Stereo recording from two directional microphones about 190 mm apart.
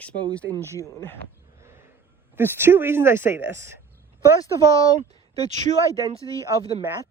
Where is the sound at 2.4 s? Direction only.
10° right (ahead or behind).